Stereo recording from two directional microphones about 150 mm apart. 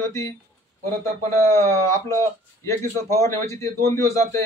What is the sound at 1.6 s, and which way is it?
A man's voice, 20° left (ahead or behind).